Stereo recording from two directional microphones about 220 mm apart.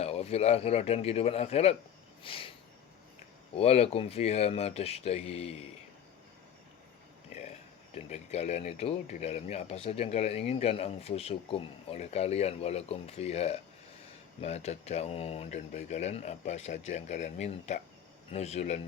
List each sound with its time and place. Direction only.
0.0 s speech: 25° left (ahead or behind)
2.2 s a sound: 25° left (ahead or behind)
3.5 s speech: 30° left (ahead or behind)
7.9 s speech: 30° left (ahead or behind)